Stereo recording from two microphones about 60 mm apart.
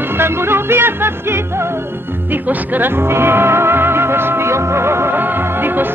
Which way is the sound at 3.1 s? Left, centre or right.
Right.